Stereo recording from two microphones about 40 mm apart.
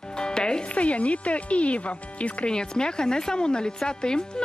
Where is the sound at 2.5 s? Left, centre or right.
Left.